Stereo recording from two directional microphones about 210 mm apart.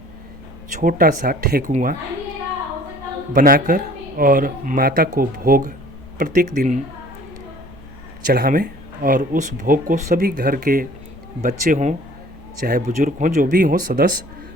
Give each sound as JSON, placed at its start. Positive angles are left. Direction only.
{"t": 0.8, "sound": "speech", "side_deg": -40}
{"t": 3.3, "sound": "speech", "side_deg": -40}
{"t": 8.3, "sound": "speech", "side_deg": -45}